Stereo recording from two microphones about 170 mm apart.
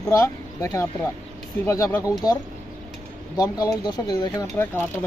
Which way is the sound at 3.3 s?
20° left (ahead or behind).